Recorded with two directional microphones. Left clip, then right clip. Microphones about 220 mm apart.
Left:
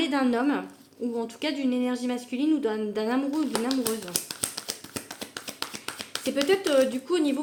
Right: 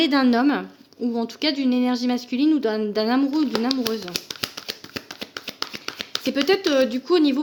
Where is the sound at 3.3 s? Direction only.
25° right (ahead or behind).